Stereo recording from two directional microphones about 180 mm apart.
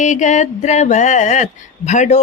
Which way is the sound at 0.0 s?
40° left (ahead or behind).